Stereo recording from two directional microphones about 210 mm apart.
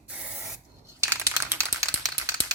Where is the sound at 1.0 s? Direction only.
15° right (ahead or behind).